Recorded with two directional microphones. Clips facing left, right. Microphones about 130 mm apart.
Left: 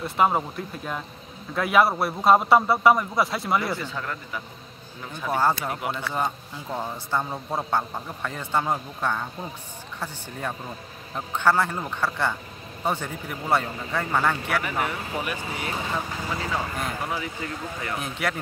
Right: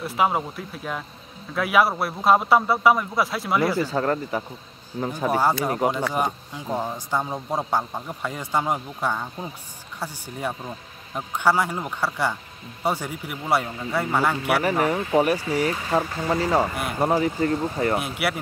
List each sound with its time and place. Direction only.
0.0 s a man's voice: centre (ahead or behind)
3.9 s speech: 45° right (ahead or behind)
5.3 s speech: 10° right (ahead or behind)
14.6 s speech: 40° right (ahead or behind)
18.0 s speech: 10° right (ahead or behind)